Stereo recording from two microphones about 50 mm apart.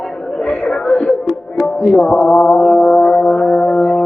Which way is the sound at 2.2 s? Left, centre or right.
Centre.